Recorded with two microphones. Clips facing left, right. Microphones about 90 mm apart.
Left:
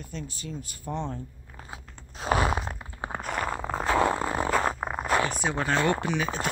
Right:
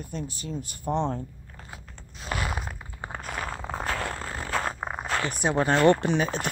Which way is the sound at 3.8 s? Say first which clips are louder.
Left 9 dB; 15° left (ahead or behind).